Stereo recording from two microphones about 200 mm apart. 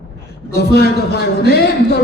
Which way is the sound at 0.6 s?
50° left (ahead or behind).